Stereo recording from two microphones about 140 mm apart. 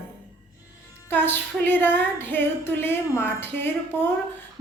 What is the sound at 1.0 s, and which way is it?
Female singing, 15° left (ahead or behind).